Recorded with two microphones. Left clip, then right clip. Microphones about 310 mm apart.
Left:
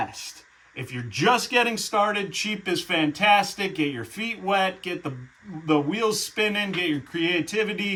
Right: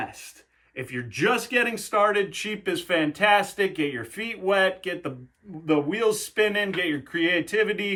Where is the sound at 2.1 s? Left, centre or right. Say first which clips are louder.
Right 1 dB; centre.